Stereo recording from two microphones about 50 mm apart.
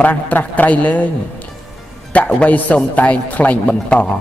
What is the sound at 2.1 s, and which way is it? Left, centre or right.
A man's voice, left.